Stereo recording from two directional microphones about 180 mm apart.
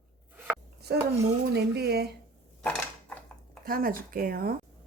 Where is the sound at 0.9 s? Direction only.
60° right (ahead or behind).